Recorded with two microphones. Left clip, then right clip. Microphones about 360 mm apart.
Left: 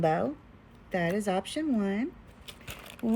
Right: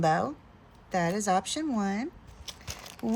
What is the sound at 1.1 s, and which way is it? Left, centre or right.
Speech, centre.